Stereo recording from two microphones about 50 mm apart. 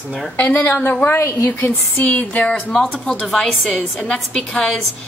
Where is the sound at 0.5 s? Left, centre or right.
Left.